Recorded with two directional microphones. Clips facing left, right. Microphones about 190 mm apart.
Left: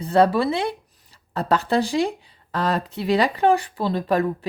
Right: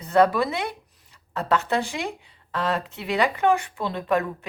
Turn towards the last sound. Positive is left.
turn(degrees=35)  # may be behind; listen again after turning